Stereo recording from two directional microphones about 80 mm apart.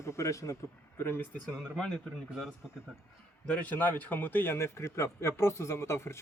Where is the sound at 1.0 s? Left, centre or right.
Left.